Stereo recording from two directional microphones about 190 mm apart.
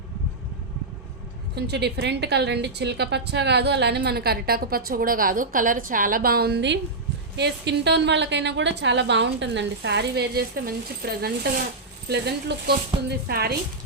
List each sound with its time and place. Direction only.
1.5 s a woman's voice: 60° right (ahead or behind)